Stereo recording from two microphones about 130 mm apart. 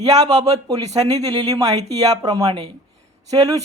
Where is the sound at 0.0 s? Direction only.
30° right (ahead or behind).